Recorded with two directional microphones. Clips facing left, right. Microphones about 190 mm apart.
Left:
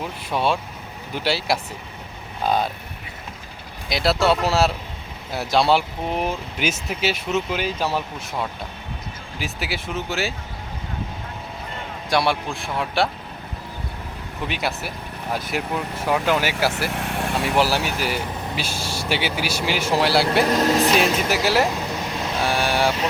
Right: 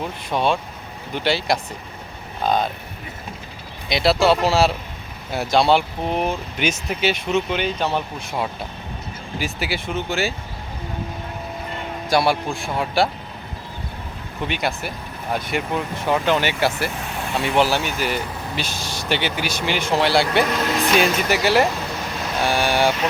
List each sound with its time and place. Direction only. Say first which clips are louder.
0.3 s speech: right 1 dB; 5° left (ahead or behind)
3.8 s speech: right 2 dB; centre (ahead or behind)
9.4 s speech: right 2 dB; centre (ahead or behind)
12.0 s speech: right 2 dB; centre (ahead or behind)
14.4 s speech: right 2 dB; 5° left (ahead or behind)
20.5 s speech: left 4 dB; 35° left (ahead or behind)
20.9 s speech: right 1 dB; centre (ahead or behind)